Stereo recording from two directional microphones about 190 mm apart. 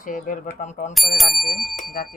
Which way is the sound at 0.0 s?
45° left (ahead or behind).